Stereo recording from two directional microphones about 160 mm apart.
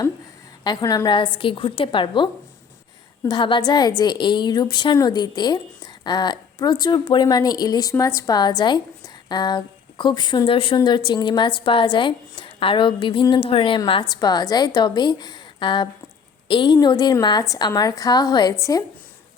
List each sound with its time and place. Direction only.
0.6 s a woman's voice: 25° left (ahead or behind)